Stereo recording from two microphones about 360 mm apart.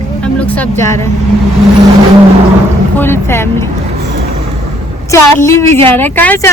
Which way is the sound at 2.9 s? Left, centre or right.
Centre.